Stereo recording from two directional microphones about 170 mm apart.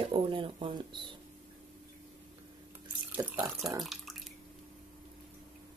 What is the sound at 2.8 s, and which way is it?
Water, 10° right (ahead or behind).